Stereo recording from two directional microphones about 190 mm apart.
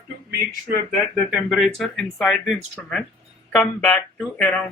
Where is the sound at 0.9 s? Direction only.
Centre (ahead or behind).